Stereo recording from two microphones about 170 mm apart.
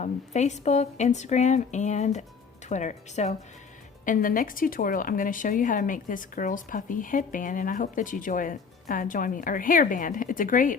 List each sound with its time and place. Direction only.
0.0 s a woman's voice: 45° left (ahead or behind)